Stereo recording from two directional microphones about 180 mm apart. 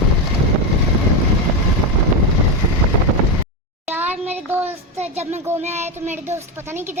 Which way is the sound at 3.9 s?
10° right (ahead or behind).